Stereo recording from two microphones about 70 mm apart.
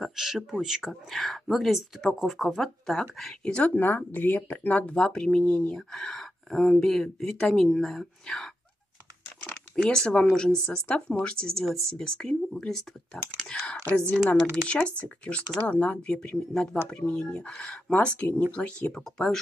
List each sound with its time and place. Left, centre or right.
0.0 s speech: centre
3.7 s speech: left; by 14.6 s centre
14.7 s speech: centre